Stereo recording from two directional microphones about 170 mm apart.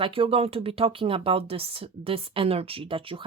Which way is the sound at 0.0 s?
30° right (ahead or behind).